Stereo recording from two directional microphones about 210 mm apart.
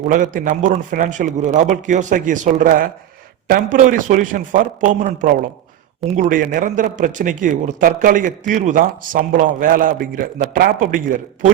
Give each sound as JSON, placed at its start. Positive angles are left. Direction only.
{"t": 0.0, "sound": "a man's voice", "side_deg": -40}